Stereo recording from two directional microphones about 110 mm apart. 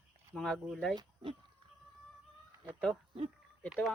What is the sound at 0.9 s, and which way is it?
Speech, 50° right (ahead or behind).